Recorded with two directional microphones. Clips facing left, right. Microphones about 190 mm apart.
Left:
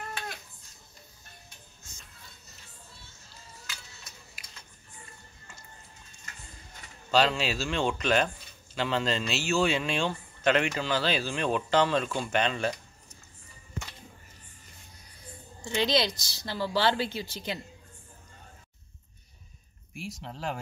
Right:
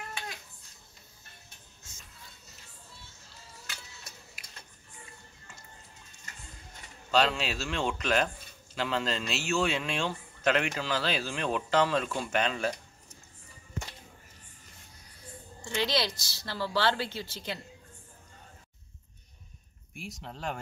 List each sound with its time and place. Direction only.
7.1 s a man's voice: centre (ahead or behind)
15.6 s a woman's voice: 20° left (ahead or behind)
19.9 s a man's voice: centre (ahead or behind)